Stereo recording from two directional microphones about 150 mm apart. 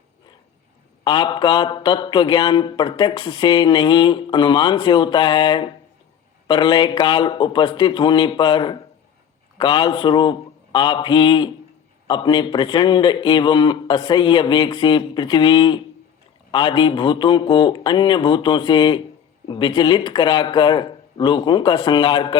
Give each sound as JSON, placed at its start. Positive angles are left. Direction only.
{"t": 1.0, "sound": "speech", "side_deg": 30}